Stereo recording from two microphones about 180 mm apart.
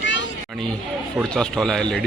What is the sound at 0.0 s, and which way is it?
Children playing, 90° left.